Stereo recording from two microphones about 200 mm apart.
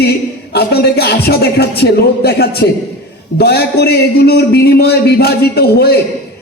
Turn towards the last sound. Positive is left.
turn(degrees=55)  # may be behind; listen again after turning